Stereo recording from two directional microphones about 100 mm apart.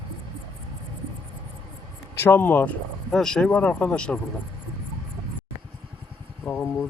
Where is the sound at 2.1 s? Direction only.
25° left (ahead or behind).